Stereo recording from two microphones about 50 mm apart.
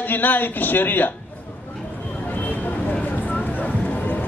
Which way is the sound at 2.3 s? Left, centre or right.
Left.